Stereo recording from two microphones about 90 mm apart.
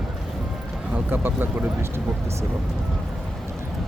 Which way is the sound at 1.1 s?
25° right (ahead or behind).